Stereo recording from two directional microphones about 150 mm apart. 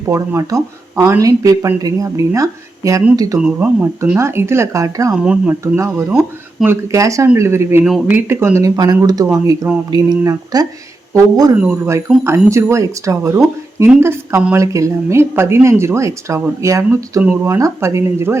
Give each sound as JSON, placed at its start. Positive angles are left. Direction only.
{"t": 0.1, "sound": "a woman's voice", "side_deg": -20}
{"t": 3.3, "sound": "speech", "side_deg": -10}
{"t": 5.1, "sound": "a woman's voice", "side_deg": -5}